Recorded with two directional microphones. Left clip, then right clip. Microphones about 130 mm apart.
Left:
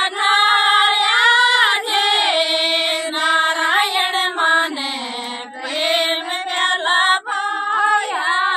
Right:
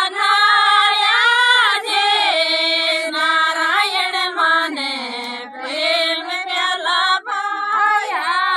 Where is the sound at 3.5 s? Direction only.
10° left (ahead or behind).